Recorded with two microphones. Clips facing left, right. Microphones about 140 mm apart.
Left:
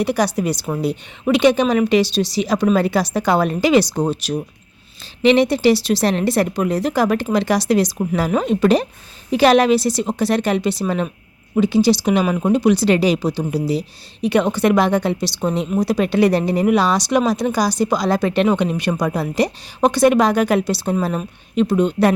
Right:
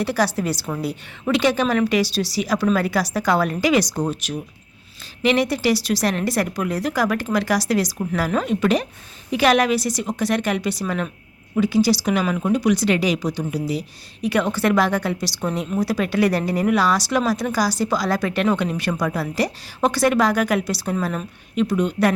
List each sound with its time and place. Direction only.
0.0 s a woman's voice: 15° left (ahead or behind)